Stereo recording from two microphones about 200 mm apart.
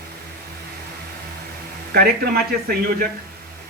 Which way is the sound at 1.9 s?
50° right (ahead or behind).